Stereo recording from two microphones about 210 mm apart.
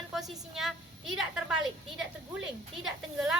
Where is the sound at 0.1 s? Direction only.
Centre (ahead or behind).